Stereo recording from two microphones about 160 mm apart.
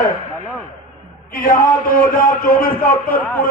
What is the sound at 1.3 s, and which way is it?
A man's voice, 60° left (ahead or behind).